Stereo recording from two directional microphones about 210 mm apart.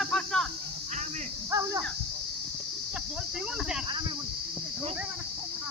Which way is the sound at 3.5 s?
5° right (ahead or behind).